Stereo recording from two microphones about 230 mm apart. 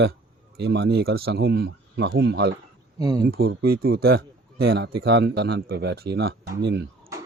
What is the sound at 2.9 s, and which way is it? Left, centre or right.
Speech, centre.